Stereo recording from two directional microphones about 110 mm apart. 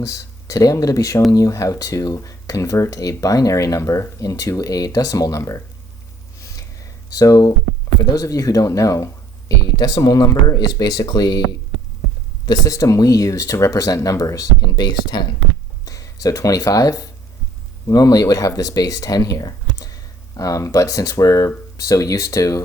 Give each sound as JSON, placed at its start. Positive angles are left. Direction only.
{"t": 0.0, "sound": "speech", "side_deg": 30}
{"t": 7.1, "sound": "speech", "side_deg": 35}
{"t": 12.5, "sound": "speech", "side_deg": 35}